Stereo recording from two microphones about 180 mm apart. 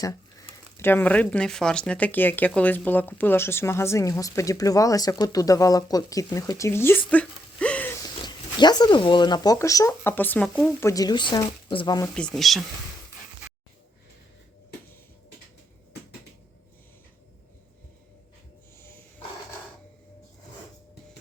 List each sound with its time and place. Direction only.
0.0 s a woman's voice: 20° left (ahead or behind)
7.1 s a sound: 5° left (ahead or behind)
8.0 s speech: 25° left (ahead or behind); by 10.8 s 5° left (ahead or behind)
10.8 s speech: 15° left (ahead or behind)
12.1 s speech: 5° left (ahead or behind)